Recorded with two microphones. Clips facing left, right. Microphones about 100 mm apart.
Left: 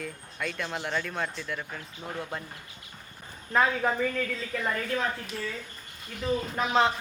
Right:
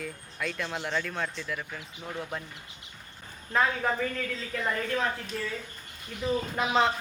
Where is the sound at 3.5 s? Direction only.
5° left (ahead or behind).